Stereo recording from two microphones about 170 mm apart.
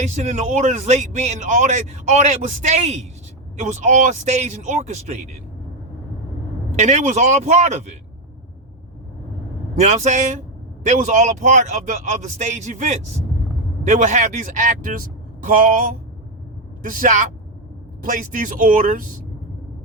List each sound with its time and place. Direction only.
0.0 s speech: 45° right (ahead or behind)
6.7 s speech: 45° right (ahead or behind)
9.7 s speech: 45° right (ahead or behind)